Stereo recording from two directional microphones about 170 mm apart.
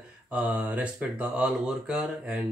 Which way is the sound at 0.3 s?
10° right (ahead or behind).